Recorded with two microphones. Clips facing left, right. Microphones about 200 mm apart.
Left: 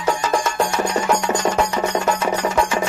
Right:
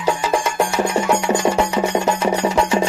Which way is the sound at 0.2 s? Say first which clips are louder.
Right 1 dB; 10° right (ahead or behind).